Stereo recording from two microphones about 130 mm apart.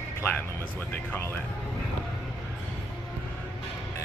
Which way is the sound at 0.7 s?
10° left (ahead or behind).